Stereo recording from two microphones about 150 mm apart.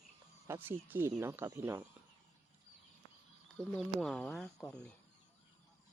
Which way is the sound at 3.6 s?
5° left (ahead or behind).